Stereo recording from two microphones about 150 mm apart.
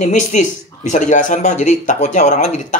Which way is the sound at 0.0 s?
55° left (ahead or behind).